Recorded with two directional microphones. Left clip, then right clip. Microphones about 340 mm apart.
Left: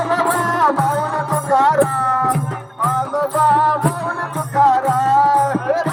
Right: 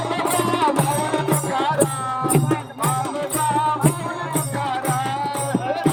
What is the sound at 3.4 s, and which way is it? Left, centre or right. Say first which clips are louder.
Music: left 5 dB; centre.